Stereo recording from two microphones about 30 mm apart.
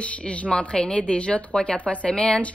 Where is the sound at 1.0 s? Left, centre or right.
Left.